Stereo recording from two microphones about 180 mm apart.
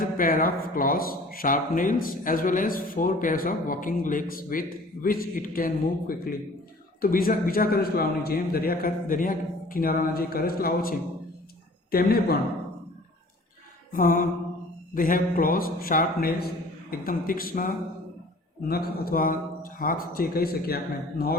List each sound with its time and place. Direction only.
0.0 s speech: 50° left (ahead or behind)
13.9 s speech: 50° left (ahead or behind)
18.7 s speech: 55° left (ahead or behind)